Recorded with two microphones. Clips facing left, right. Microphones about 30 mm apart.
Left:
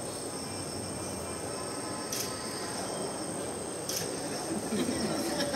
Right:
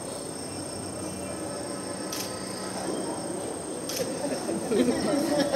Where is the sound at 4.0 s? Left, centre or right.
Centre.